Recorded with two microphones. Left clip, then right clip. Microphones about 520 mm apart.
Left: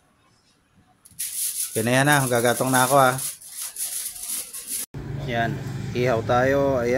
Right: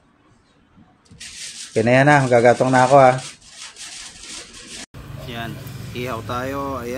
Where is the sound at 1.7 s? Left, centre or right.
Left.